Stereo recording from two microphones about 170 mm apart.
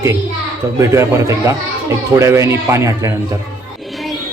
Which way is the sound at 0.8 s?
15° right (ahead or behind).